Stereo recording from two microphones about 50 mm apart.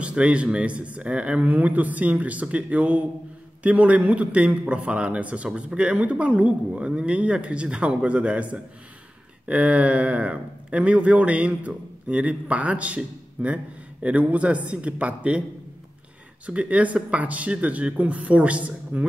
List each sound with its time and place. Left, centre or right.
0.0 s speech: right
16.4 s speech: right